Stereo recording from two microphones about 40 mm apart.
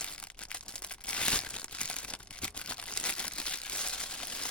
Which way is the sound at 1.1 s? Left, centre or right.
Left.